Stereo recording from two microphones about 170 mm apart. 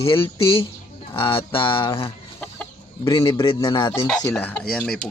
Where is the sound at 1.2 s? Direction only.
30° left (ahead or behind).